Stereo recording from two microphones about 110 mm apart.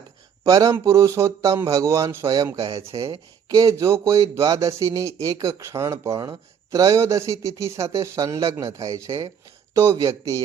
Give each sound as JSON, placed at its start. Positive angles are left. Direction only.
{"t": 0.4, "sound": "speech", "side_deg": -30}